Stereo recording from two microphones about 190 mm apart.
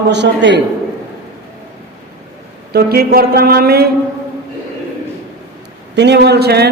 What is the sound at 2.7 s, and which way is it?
A man's voice, 50° right (ahead or behind).